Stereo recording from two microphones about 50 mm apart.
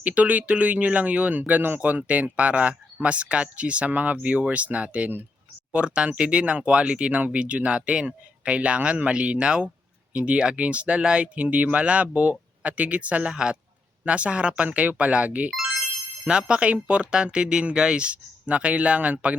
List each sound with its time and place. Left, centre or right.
0.0 s speech: right
1.8 s speech: right
15.4 s speech: centre
16.2 s speech: centre